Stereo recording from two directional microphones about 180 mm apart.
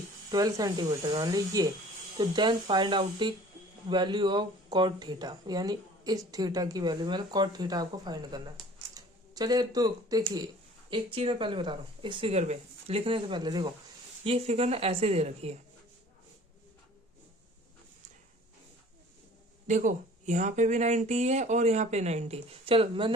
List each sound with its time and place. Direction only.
0.3 s speech: 20° right (ahead or behind)
14.3 s speech: 35° right (ahead or behind)
19.6 s speech: 45° right (ahead or behind)